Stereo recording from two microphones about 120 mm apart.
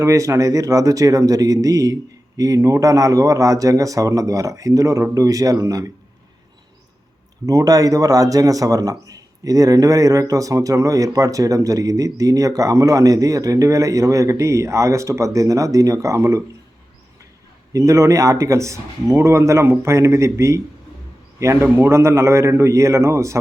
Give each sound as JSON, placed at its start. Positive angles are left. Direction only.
{"t": 0.0, "sound": "a man's voice", "side_deg": -25}
{"t": 7.4, "sound": "a man's voice", "side_deg": -30}
{"t": 17.7, "sound": "a man's voice", "side_deg": -25}